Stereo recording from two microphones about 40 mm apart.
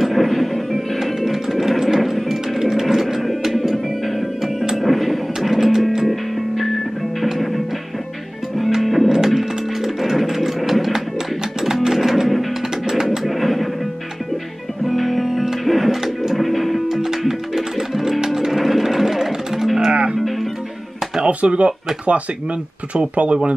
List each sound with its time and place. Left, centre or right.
0.0 s music: centre
8.7 s music: centre
12.8 s bird: centre
14.9 s music: centre
19.9 s music: right
21.2 s a sound: right
22.9 s speech: right